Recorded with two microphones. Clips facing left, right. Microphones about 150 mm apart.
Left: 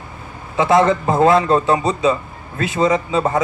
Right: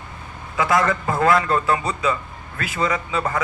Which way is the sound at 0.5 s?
25° left (ahead or behind).